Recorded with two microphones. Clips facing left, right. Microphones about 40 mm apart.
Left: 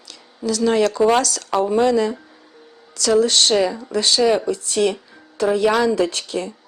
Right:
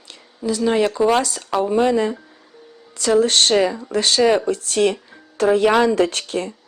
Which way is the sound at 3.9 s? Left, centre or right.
Right.